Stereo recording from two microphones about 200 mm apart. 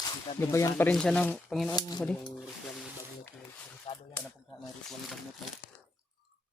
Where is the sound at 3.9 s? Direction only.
30° left (ahead or behind).